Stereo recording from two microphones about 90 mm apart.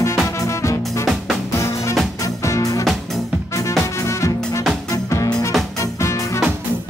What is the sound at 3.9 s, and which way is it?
Music, 35° left (ahead or behind).